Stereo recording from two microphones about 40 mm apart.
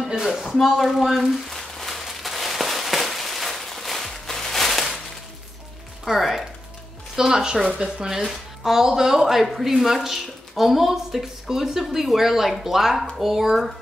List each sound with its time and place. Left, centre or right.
0.3 s speech: centre
1.5 s a sound: centre
2.0 s fireworks: centre
6.0 s a woman's voice: centre